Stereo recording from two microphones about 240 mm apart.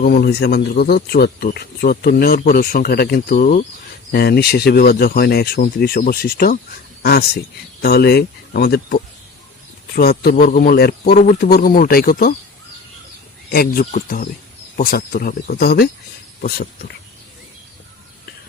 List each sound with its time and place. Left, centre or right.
0.0 s speech: left
13.5 s speech: left